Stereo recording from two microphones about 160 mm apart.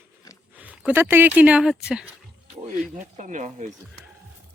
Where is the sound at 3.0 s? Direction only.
50° right (ahead or behind).